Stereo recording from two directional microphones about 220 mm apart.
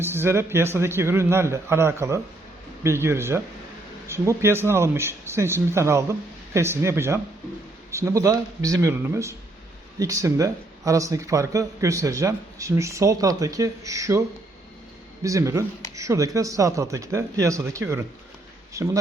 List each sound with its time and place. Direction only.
0.0 s speech: 10° right (ahead or behind)